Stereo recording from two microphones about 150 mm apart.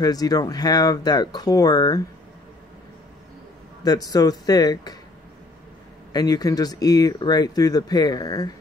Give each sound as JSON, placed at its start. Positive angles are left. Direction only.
{"t": 0.0, "sound": "speech", "side_deg": 25}
{"t": 3.8, "sound": "speech", "side_deg": 25}
{"t": 6.1, "sound": "speech", "side_deg": 25}